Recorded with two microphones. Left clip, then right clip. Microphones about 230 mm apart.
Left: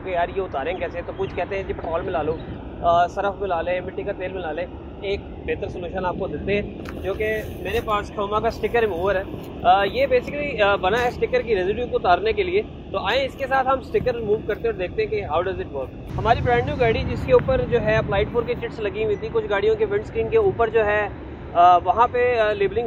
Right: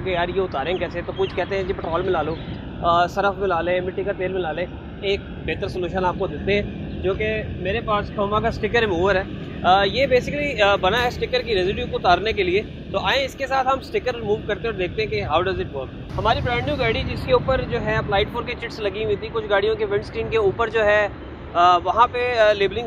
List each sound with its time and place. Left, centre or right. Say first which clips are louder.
0.0 s speech: right 1 dB; right